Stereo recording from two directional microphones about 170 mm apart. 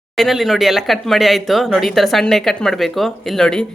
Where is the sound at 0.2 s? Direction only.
Centre (ahead or behind).